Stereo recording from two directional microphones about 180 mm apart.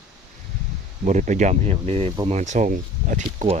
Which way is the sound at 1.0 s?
45° right (ahead or behind).